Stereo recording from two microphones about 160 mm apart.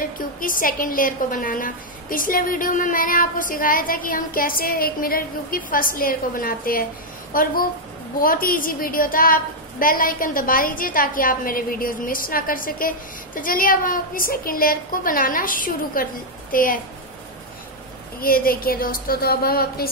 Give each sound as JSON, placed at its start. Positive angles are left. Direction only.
{"t": 0.0, "sound": "a woman's voice", "side_deg": 60}
{"t": 18.2, "sound": "a woman's voice", "side_deg": 65}